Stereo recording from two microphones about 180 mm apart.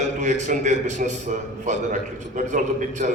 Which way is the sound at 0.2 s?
40° right (ahead or behind).